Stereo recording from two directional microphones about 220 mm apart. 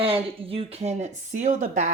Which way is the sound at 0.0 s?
25° right (ahead or behind).